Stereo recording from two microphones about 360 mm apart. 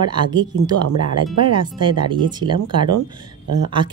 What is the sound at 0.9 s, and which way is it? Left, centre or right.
Speech, right.